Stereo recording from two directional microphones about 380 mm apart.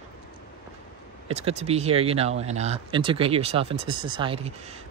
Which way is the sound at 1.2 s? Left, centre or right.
Centre.